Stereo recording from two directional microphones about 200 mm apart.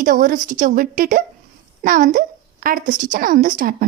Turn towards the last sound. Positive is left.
turn(degrees=-45)  # may be behind; listen again after turning